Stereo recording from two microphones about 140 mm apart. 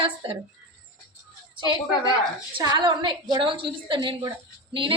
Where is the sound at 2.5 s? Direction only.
30° right (ahead or behind).